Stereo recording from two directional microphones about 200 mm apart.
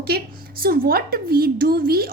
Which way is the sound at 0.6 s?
50° right (ahead or behind).